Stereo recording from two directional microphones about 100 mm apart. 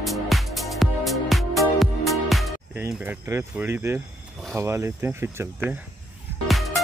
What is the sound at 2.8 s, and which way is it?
Speech, 30° right (ahead or behind).